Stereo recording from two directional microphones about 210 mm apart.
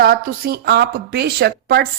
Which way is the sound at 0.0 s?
45° right (ahead or behind).